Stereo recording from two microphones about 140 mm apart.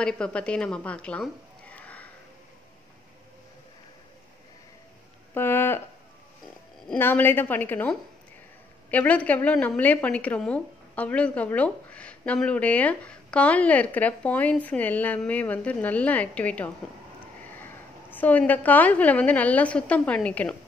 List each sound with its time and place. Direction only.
0.0 s a woman's voice: 5° left (ahead or behind)
5.3 s a sound: 15° left (ahead or behind)
7.0 s a woman's voice: 15° left (ahead or behind)